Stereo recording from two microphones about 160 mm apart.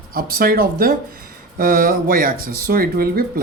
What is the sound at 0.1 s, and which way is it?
Speech, 70° right (ahead or behind).